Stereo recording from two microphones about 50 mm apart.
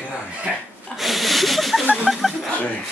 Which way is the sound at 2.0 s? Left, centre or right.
Centre.